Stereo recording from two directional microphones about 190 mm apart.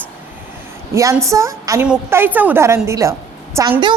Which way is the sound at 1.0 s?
15° right (ahead or behind).